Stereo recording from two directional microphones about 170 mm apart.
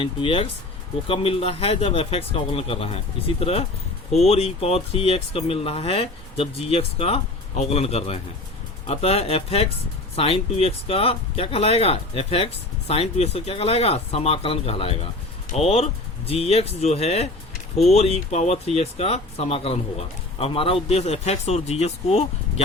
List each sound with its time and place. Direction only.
0.0 s speech: 30° left (ahead or behind)